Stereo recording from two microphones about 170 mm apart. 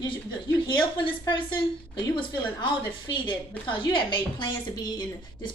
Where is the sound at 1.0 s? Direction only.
30° left (ahead or behind).